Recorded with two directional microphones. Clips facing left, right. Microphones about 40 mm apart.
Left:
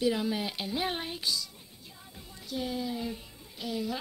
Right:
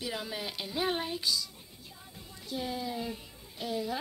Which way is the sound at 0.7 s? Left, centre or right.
Left.